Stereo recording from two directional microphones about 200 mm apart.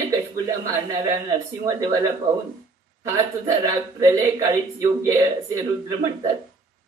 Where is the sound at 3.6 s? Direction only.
15° right (ahead or behind).